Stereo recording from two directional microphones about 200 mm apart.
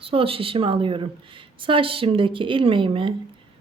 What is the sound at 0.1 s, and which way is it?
A woman's voice, 30° right (ahead or behind).